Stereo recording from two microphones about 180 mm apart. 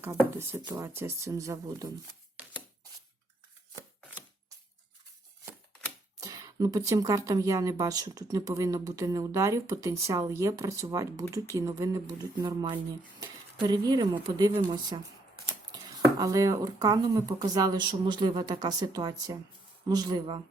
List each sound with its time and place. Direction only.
0.3 s speech: 15° right (ahead or behind)
6.1 s speech: 20° right (ahead or behind)